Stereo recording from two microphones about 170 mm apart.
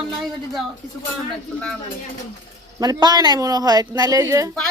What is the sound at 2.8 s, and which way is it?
Speech, 25° right (ahead or behind).